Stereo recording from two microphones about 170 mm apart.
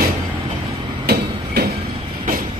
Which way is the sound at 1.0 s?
70° right (ahead or behind).